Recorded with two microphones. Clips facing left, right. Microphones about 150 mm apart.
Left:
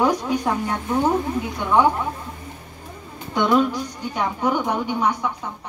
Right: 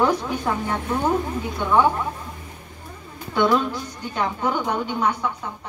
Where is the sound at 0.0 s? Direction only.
15° left (ahead or behind).